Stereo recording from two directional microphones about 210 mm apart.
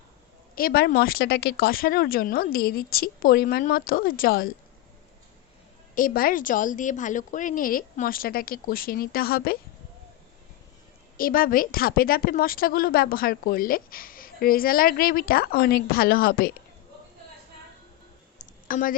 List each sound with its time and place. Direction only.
0.5 s a woman's voice: 45° left (ahead or behind)
5.9 s a woman's voice: 40° left (ahead or behind)
11.2 s a woman's voice: 45° left (ahead or behind)
18.3 s clicking: 40° left (ahead or behind)